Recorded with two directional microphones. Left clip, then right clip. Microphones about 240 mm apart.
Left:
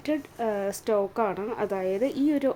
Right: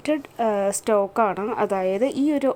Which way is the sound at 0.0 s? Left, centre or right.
Centre.